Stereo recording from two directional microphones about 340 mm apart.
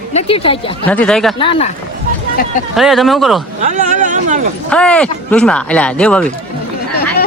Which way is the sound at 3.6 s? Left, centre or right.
Right.